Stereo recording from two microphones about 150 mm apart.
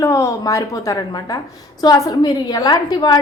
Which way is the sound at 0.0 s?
20° left (ahead or behind).